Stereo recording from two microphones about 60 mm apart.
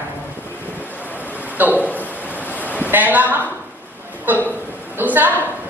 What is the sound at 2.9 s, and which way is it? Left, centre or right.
A man's voice, right.